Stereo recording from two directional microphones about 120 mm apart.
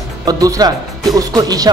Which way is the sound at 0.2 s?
30° right (ahead or behind).